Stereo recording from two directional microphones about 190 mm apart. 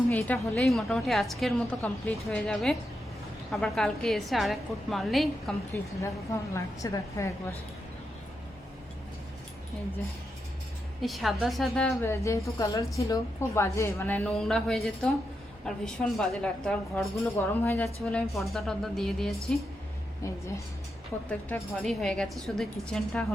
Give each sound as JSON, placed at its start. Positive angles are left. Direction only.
{"t": 0.1, "sound": "a woman's voice", "side_deg": 10}
{"t": 11.0, "sound": "a woman's voice", "side_deg": 0}
{"t": 12.0, "sound": "a woman's voice", "side_deg": 15}
{"t": 20.2, "sound": "a woman's voice", "side_deg": 15}
{"t": 21.2, "sound": "a woman's voice", "side_deg": 5}